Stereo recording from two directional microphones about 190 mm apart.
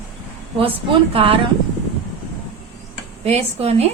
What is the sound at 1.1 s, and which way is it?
Speech, 30° right (ahead or behind).